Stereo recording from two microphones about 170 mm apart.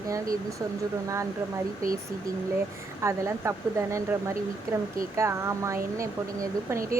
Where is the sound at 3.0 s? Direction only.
15° right (ahead or behind).